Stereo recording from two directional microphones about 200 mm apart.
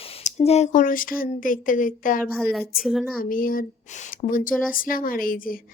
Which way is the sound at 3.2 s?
45° left (ahead or behind).